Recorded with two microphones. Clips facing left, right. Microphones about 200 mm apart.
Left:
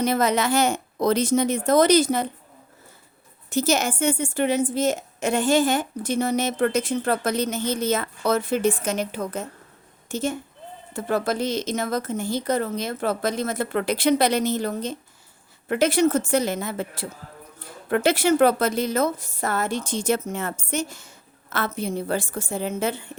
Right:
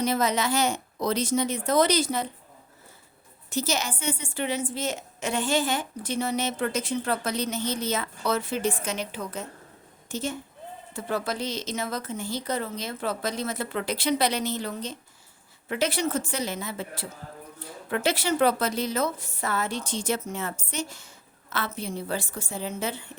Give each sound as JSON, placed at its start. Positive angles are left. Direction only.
{"t": 0.0, "sound": "a woman's voice", "side_deg": 55}
{"t": 3.5, "sound": "a woman's voice", "side_deg": 50}